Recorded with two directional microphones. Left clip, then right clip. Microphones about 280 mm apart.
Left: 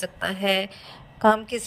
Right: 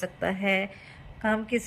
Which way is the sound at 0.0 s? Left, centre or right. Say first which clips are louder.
Left 2 dB; centre.